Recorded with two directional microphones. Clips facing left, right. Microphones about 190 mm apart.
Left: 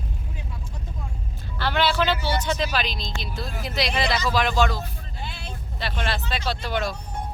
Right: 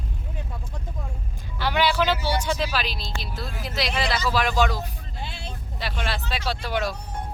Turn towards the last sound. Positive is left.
turn(degrees=-10)  # may be behind; listen again after turning